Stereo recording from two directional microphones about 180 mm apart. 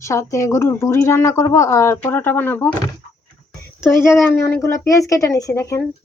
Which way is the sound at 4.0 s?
15° left (ahead or behind).